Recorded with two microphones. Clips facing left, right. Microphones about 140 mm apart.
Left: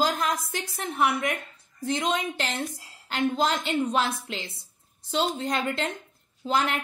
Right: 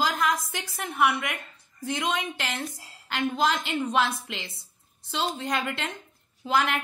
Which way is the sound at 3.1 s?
35° left (ahead or behind).